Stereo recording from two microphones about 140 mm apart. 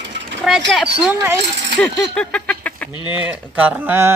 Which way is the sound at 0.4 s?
5° left (ahead or behind).